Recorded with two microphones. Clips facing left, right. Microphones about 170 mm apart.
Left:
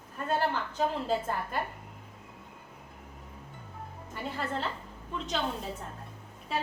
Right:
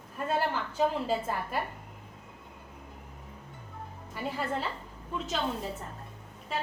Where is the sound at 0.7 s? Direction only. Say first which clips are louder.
Right 1 dB; 5° right (ahead or behind).